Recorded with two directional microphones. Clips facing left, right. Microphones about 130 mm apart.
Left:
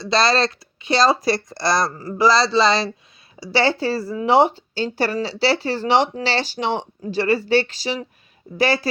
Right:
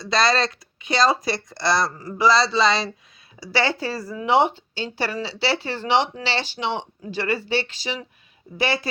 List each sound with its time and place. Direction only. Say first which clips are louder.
0.0 s speech: left 2 dB; 30° left (ahead or behind)